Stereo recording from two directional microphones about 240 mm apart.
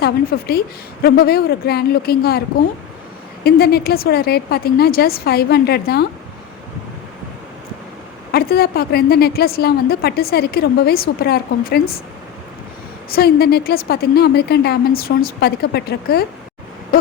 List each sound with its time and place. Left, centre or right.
0.0 s a woman's voice: left
3.4 s a woman's voice: left
8.3 s a woman's voice: left
13.1 s a woman's voice: left